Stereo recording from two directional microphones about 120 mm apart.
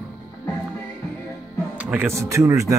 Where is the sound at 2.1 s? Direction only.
25° right (ahead or behind).